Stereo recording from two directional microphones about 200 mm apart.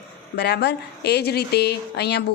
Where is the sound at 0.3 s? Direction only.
55° left (ahead or behind).